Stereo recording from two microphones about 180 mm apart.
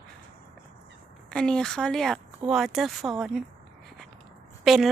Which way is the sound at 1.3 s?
5° left (ahead or behind).